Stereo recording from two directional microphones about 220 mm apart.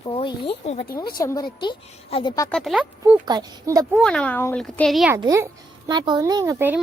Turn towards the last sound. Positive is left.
turn(degrees=-10)  # may be behind; listen again after turning